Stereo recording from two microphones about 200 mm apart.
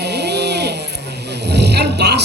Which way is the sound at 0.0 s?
55° right (ahead or behind).